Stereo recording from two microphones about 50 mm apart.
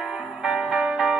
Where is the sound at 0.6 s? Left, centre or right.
Centre.